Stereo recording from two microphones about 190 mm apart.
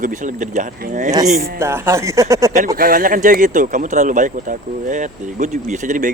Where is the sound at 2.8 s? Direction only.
50° right (ahead or behind).